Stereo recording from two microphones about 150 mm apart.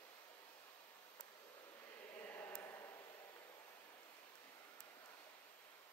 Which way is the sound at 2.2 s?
15° left (ahead or behind).